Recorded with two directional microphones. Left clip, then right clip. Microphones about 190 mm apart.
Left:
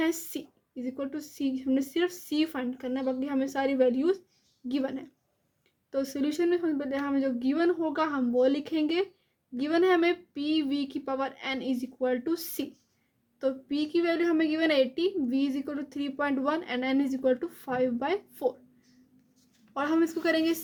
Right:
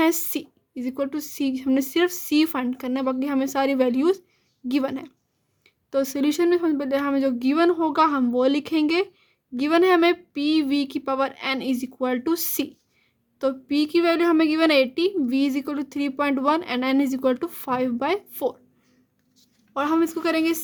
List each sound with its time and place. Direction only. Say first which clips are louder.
0.0 s a woman's voice: right 8 dB; 40° right (ahead or behind)
19.4 s speech: right 6 dB; 25° right (ahead or behind)